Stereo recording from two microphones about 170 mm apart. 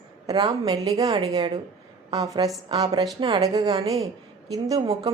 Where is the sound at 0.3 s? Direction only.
25° right (ahead or behind).